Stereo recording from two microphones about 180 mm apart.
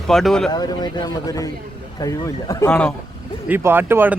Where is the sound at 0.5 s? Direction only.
25° left (ahead or behind).